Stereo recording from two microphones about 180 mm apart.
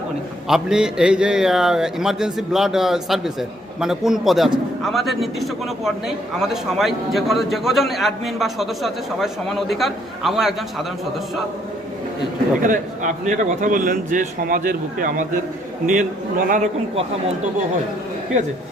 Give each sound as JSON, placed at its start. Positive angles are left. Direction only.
{"t": 0.4, "sound": "a man's voice", "side_deg": -5}
{"t": 12.6, "sound": "a man's voice", "side_deg": -45}
{"t": 16.5, "sound": "a man's voice", "side_deg": -40}